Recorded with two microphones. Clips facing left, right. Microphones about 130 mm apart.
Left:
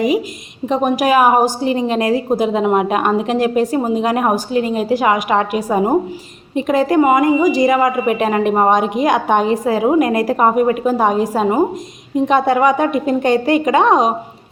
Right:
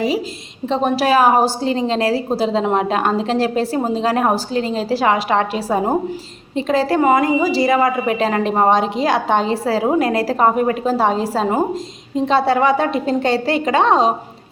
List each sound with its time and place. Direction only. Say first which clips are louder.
0.7 s a woman's voice: left 1 dB; 15° left (ahead or behind)